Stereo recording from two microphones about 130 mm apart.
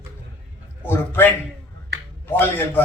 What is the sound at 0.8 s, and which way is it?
Speech, 15° left (ahead or behind).